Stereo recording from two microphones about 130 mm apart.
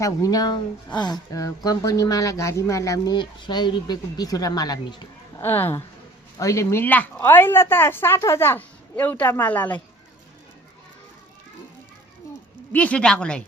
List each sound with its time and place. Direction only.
0.0 s a woman's voice: 25° left (ahead or behind)
5.4 s speech: 15° left (ahead or behind)
12.7 s speech: 10° left (ahead or behind)